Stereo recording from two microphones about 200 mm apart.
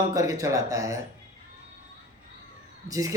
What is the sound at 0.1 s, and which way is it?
Mantra, 15° right (ahead or behind).